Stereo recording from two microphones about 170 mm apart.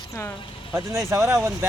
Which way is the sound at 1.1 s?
15° right (ahead or behind).